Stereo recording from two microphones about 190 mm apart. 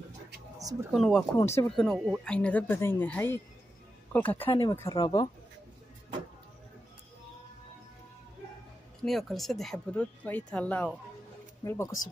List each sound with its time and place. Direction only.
0.6 s a sound: 20° right (ahead or behind)
0.9 s speech: centre (ahead or behind)
4.5 s speech: 25° left (ahead or behind)
9.0 s speech: centre (ahead or behind)